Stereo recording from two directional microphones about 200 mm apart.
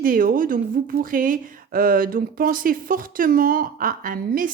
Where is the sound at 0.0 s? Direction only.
45° right (ahead or behind).